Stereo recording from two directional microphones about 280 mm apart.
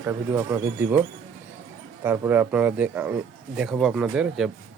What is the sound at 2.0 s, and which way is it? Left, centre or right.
Speech, centre.